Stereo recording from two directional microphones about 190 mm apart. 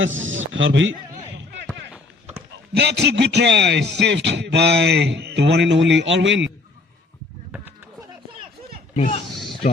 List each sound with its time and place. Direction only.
0.0 s speech: 90° right
2.7 s a man's voice: 60° right (ahead or behind)
9.0 s speech: 35° left (ahead or behind)